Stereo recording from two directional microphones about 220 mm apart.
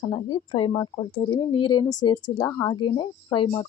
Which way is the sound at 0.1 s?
25° left (ahead or behind).